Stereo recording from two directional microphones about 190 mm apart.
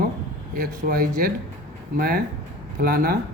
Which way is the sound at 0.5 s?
50° right (ahead or behind).